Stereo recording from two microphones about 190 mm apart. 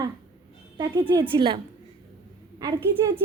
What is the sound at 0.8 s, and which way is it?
A woman's voice, 20° right (ahead or behind).